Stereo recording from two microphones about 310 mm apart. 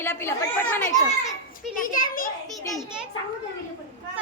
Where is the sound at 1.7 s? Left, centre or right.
Left.